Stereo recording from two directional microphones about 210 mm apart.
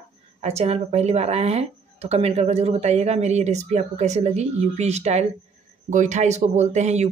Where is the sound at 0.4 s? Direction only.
30° right (ahead or behind).